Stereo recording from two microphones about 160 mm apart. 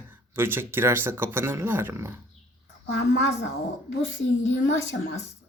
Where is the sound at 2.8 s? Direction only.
90° left.